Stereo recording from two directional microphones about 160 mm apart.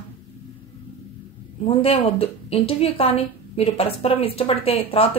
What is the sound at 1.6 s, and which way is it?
A woman's voice, 35° left (ahead or behind).